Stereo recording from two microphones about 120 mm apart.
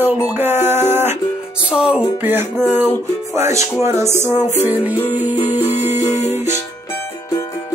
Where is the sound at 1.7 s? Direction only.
5° right (ahead or behind).